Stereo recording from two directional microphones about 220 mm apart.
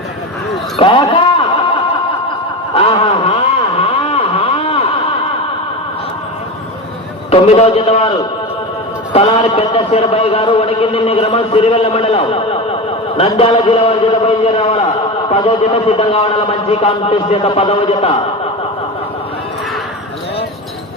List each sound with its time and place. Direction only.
0.8 s a man's voice: 25° left (ahead or behind)
2.7 s a sound: 25° left (ahead or behind)
7.3 s a man's voice: 25° left (ahead or behind)
9.1 s a man's voice: 30° left (ahead or behind)